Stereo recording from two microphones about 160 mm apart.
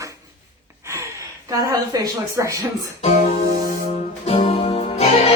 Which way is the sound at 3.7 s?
55° left (ahead or behind).